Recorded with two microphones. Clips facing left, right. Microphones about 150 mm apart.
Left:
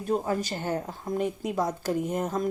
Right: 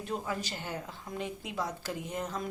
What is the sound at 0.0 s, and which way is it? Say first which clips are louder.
Speech: left 8 dB; 45° left (ahead or behind).